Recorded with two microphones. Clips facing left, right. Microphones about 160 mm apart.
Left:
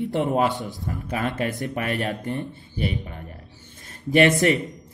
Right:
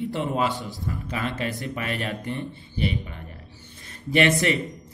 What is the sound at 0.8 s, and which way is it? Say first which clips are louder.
Speech: left 2 dB; 50° left (ahead or behind).